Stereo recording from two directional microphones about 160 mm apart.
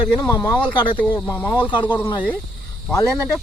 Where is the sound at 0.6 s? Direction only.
10° left (ahead or behind).